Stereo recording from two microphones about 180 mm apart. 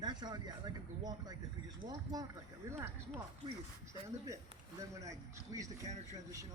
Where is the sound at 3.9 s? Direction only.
15° right (ahead or behind).